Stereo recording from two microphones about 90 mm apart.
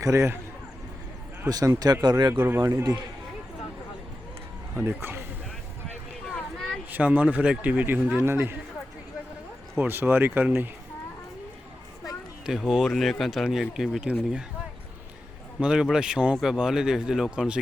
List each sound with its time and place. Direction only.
0.0 s a man's voice: 30° right (ahead or behind)
1.5 s speech: 45° right (ahead or behind)
2.3 s speech: 20° right (ahead or behind)
4.7 s speech: 25° right (ahead or behind)
6.9 s speech: 20° right (ahead or behind)
9.7 s speech: 25° right (ahead or behind)
12.5 s speech: 5° right (ahead or behind)
14.0 s speech: 10° right (ahead or behind)
15.6 s speech: 10° right (ahead or behind)